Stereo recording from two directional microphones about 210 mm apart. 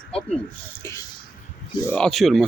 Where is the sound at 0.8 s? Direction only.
15° left (ahead or behind).